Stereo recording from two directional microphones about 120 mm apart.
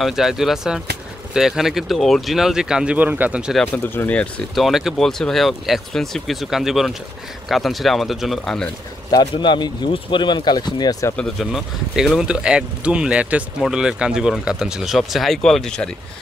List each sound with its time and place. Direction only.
0.0 s speech: 5° right (ahead or behind)
3.7 s speech: 15° left (ahead or behind)
4.6 s speech: centre (ahead or behind)
9.1 s speech: 40° left (ahead or behind)
11.1 s speech: centre (ahead or behind)